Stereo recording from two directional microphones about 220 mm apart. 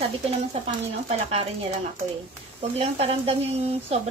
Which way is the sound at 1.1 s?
30° right (ahead or behind).